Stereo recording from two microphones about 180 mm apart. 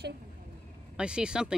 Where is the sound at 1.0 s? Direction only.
5° right (ahead or behind).